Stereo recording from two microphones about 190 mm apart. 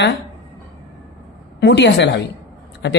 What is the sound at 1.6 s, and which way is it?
Speech, 65° left (ahead or behind).